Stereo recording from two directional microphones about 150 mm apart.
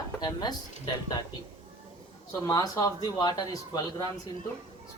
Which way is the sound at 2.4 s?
25° left (ahead or behind).